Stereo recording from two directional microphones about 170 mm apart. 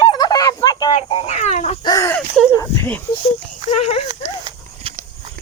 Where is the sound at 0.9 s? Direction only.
40° left (ahead or behind).